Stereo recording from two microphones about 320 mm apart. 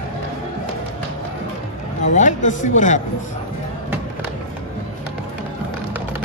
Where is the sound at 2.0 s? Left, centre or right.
Left.